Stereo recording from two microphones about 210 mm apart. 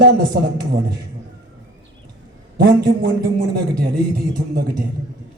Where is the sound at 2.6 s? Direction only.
50° right (ahead or behind).